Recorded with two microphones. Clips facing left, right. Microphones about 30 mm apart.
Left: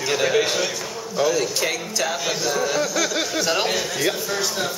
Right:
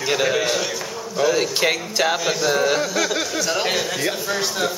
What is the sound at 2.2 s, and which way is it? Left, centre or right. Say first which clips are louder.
Speech: right 3 dB; centre.